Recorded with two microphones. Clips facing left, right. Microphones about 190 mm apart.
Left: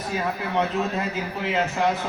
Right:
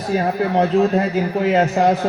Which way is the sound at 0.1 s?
35° right (ahead or behind).